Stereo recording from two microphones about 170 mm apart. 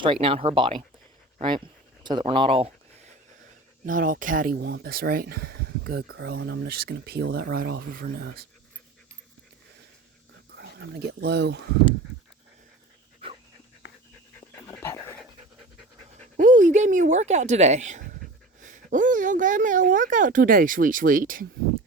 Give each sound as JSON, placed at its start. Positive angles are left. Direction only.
{"t": 0.0, "sound": "speech", "side_deg": -30}
{"t": 3.8, "sound": "speech", "side_deg": -55}
{"t": 10.5, "sound": "speech", "side_deg": -80}
{"t": 14.5, "sound": "dog", "side_deg": 15}
{"t": 16.4, "sound": "speech", "side_deg": -50}